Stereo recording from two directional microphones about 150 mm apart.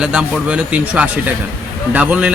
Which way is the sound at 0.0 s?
5° right (ahead or behind).